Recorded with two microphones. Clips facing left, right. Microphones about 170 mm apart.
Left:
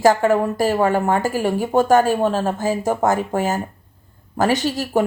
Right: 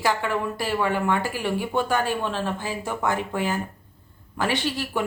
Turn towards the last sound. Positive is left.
turn(degrees=45)  # may be behind; listen again after turning